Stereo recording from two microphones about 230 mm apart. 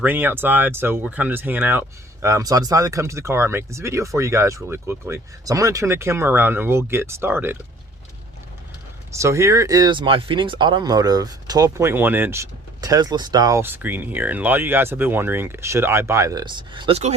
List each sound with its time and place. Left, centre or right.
0.0 s speech: centre
9.1 s speech: centre